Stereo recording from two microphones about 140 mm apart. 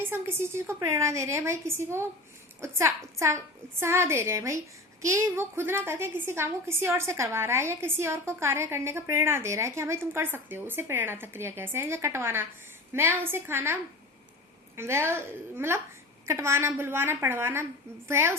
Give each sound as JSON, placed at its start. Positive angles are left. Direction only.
{"t": 0.0, "sound": "a woman's voice", "side_deg": -15}
{"t": 14.8, "sound": "a woman's voice", "side_deg": -20}